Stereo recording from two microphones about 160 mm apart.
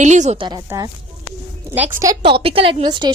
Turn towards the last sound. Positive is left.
turn(degrees=-30)  # may be behind; listen again after turning